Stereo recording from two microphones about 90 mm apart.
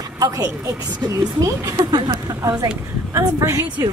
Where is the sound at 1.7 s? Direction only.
55° right (ahead or behind).